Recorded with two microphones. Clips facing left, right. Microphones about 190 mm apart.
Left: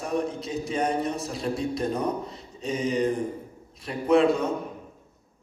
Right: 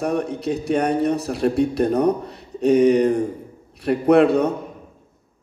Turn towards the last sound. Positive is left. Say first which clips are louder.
# right 6 dB
turn(degrees=-65)  # may be behind; listen again after turning